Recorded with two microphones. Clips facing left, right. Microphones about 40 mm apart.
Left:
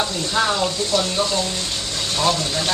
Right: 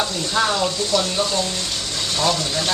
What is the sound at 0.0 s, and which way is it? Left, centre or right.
Speech, centre.